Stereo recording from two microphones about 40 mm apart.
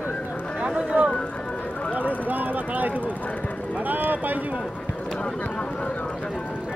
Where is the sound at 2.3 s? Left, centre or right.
Right.